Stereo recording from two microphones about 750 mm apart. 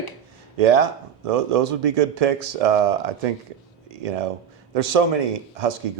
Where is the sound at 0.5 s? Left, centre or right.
Right.